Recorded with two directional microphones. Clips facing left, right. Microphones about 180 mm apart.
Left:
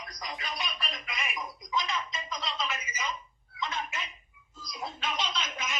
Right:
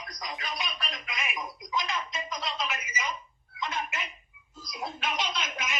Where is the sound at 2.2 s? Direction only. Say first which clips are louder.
Right 1 dB; 10° right (ahead or behind).